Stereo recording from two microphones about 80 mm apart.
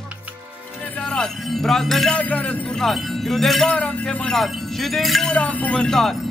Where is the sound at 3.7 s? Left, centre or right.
Centre.